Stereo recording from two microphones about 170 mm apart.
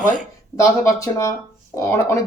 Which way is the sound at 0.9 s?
20° left (ahead or behind).